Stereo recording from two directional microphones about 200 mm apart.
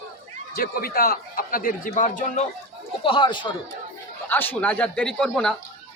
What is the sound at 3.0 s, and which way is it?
Speech, 25° left (ahead or behind).